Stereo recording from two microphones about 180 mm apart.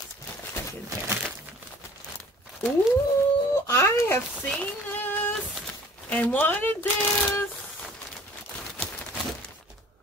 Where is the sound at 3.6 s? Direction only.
15° left (ahead or behind).